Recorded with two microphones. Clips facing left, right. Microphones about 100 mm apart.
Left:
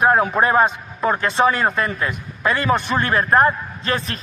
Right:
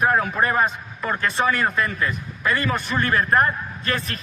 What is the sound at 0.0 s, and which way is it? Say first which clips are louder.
A man's voice: left 4 dB; 30° left (ahead or behind).